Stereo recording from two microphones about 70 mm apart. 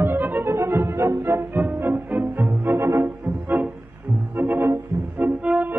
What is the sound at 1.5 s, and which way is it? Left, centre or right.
Music, right.